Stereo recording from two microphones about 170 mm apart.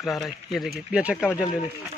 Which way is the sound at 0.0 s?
Centre (ahead or behind).